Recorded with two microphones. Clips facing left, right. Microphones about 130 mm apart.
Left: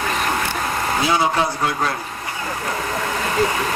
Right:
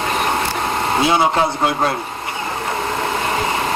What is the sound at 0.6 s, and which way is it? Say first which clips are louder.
Speech: right 4 dB; 30° right (ahead or behind).